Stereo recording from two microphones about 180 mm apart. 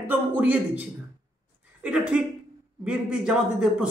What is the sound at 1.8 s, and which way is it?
Speech, 5° right (ahead or behind).